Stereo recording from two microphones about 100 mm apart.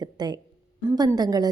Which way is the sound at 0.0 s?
45° right (ahead or behind).